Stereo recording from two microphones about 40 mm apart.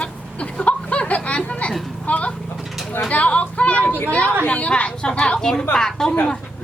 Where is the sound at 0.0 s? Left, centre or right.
Left.